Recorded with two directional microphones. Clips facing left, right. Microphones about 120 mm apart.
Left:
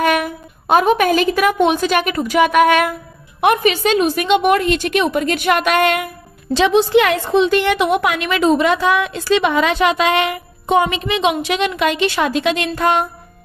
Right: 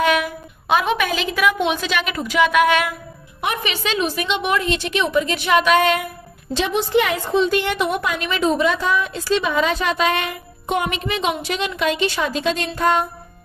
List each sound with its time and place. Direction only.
0.0 s a woman's voice: 50° left (ahead or behind)
6.5 s a woman's voice: 90° left; by 13.0 s 75° left (ahead or behind)